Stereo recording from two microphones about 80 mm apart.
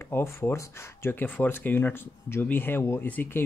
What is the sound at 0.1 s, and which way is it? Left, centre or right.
Speech, left.